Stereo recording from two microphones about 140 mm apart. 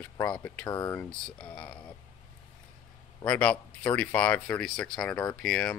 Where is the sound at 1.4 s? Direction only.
5° left (ahead or behind).